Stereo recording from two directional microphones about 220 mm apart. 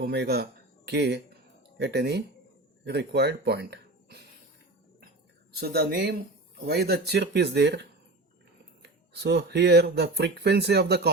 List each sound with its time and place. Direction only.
0.0 s speech: 45° right (ahead or behind)
5.5 s speech: 45° right (ahead or behind)